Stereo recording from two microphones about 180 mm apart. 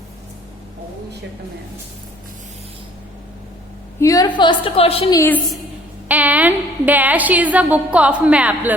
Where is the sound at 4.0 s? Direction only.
20° left (ahead or behind).